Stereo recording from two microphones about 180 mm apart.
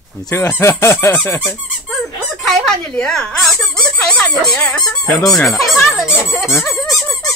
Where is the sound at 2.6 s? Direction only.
5° left (ahead or behind).